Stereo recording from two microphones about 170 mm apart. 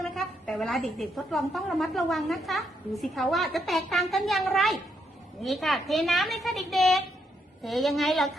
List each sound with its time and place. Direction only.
0.1 s a woman's voice: centre (ahead or behind)